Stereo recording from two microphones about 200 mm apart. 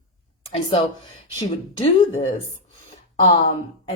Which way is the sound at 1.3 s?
25° left (ahead or behind).